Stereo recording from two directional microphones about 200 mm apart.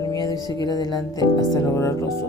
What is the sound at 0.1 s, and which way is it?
Music, 20° left (ahead or behind).